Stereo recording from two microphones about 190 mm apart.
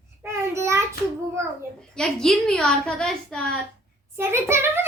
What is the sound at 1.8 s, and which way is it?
A child's voice, 5° left (ahead or behind).